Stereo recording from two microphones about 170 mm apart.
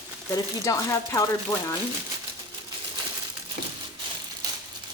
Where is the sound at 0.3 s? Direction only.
20° left (ahead or behind).